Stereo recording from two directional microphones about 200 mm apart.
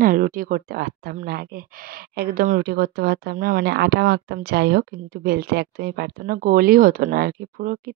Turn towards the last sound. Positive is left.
turn(degrees=-45)  # may be behind; listen again after turning